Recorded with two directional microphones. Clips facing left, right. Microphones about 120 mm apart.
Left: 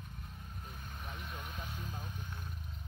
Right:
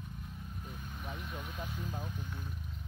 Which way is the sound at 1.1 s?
5° right (ahead or behind).